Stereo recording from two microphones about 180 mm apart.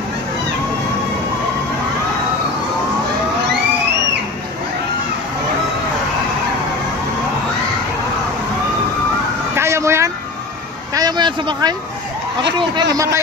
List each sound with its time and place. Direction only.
9.6 s vehicle: 15° right (ahead or behind)
11.0 s a sound: 25° right (ahead or behind)
12.9 s a man's voice: 15° right (ahead or behind)